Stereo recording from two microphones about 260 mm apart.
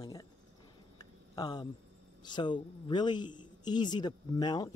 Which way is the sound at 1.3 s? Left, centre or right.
Centre.